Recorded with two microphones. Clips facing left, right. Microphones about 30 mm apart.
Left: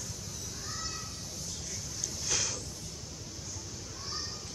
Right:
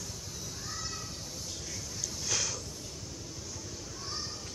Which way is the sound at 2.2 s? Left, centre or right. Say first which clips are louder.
Even; centre.